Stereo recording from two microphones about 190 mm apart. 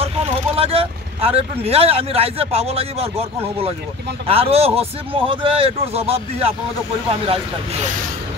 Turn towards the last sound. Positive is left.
turn(degrees=-30)  # may be behind; listen again after turning